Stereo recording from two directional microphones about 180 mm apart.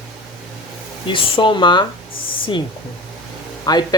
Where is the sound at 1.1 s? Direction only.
25° left (ahead or behind).